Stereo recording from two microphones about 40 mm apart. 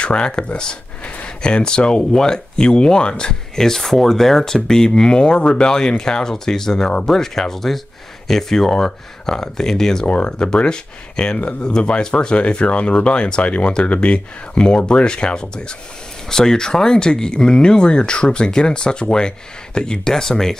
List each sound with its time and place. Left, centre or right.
0.0 s speech: left
10.0 s speech: left